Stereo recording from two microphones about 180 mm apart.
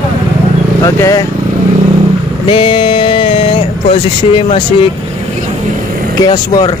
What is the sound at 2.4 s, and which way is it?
Speech, 30° left (ahead or behind).